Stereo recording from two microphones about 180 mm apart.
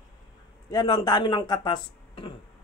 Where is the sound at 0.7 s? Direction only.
25° left (ahead or behind).